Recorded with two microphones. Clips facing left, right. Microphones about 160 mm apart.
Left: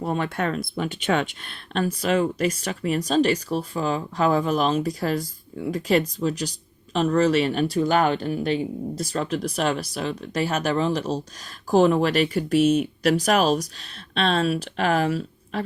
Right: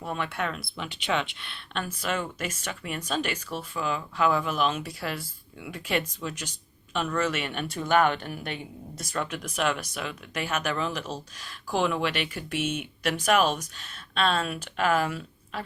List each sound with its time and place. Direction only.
0.0 s speech: 40° left (ahead or behind)